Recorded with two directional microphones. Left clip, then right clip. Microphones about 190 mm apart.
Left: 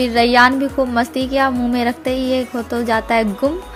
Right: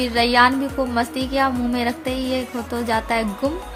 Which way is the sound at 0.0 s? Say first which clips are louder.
Left 4 dB; 25° left (ahead or behind).